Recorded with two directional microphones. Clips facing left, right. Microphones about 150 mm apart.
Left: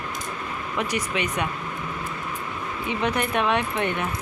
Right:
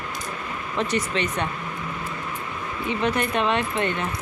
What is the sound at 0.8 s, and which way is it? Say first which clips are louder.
Speech: right 2 dB; 10° left (ahead or behind).